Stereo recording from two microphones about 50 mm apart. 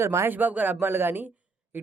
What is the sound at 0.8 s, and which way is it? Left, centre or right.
Speech, right.